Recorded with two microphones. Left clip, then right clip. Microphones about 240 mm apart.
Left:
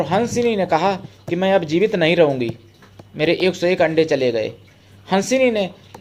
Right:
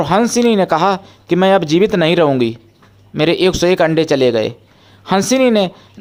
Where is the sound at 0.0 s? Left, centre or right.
Right.